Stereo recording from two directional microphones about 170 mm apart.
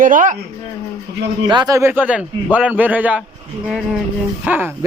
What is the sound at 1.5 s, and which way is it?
Speech, 25° right (ahead or behind).